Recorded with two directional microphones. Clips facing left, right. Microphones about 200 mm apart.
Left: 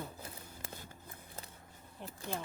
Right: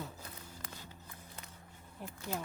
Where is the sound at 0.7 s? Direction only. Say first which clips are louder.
Left 1 dB; 50° left (ahead or behind).